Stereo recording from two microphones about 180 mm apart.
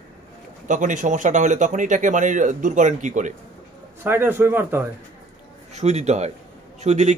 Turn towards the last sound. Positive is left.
turn(degrees=-40)  # may be behind; listen again after turning